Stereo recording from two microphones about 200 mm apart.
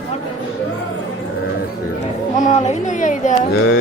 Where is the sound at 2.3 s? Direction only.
40° left (ahead or behind).